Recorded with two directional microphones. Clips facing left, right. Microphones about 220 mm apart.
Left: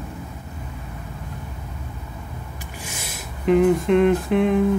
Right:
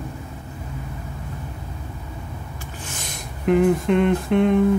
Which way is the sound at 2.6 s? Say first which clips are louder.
Even; 10° left (ahead or behind).